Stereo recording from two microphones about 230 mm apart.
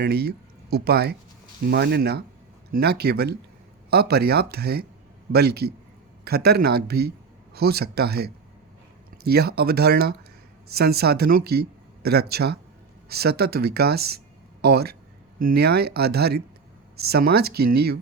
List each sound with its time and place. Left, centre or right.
0.0 s speech: right